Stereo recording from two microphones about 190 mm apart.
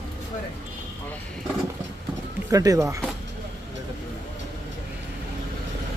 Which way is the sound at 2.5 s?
20° right (ahead or behind).